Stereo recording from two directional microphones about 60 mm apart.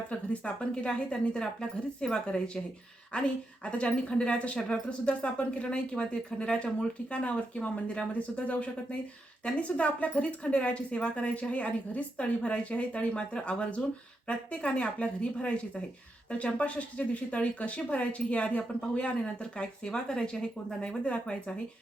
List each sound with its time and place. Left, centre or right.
0.1 s a woman's voice: centre